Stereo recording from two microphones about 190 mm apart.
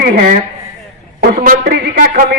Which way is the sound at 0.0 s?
50° right (ahead or behind).